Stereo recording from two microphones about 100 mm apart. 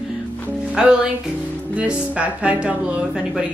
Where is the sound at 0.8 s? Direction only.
10° right (ahead or behind).